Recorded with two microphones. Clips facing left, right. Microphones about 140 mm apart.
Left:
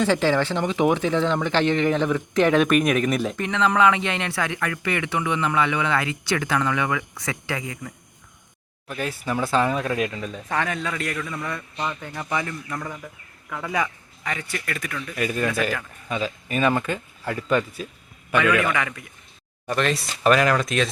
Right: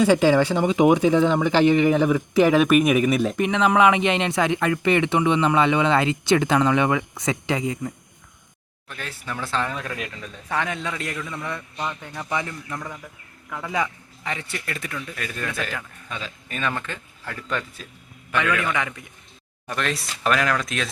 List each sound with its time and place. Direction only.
0.0 s speech: 10° right (ahead or behind)
3.3 s speech: 15° right (ahead or behind)
8.9 s speech: 10° left (ahead or behind)
10.5 s speech: 20° right (ahead or behind)
11.9 s speech: 5° left (ahead or behind)
12.3 s speech: 20° right (ahead or behind)
12.7 s speech: 5° left (ahead or behind)
14.3 s speech: 25° right (ahead or behind)
15.1 s a man's voice: 10° left (ahead or behind)
18.7 s speech: 20° right (ahead or behind)
19.6 s speech: centre (ahead or behind)